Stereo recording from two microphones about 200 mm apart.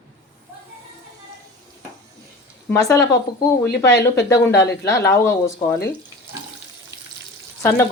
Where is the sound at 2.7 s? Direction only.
15° left (ahead or behind).